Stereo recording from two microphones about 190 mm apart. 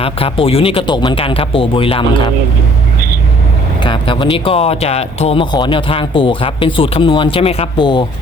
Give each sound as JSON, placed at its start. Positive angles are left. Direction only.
{"t": 0.0, "sound": "speech", "side_deg": 30}
{"t": 3.8, "sound": "speech", "side_deg": 25}